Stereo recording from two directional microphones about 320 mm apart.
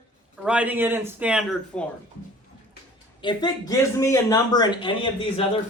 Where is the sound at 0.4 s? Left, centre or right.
Centre.